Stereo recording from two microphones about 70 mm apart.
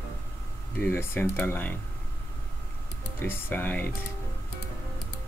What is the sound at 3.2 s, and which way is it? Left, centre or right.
Speech, left.